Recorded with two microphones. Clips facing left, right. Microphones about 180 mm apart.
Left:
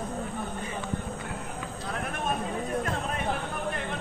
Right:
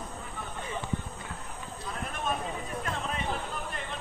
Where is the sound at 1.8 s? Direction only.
65° left (ahead or behind).